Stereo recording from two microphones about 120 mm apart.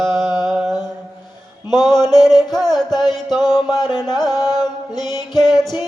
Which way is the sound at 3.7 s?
35° left (ahead or behind).